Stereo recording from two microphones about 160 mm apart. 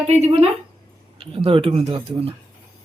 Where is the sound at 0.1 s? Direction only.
40° right (ahead or behind).